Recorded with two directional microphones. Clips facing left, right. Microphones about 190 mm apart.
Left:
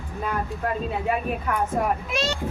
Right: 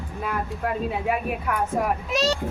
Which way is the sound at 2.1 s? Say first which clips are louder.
Right 3 dB; 40° right (ahead or behind).